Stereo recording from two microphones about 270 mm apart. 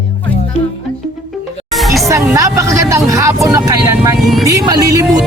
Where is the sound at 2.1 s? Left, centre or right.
Centre.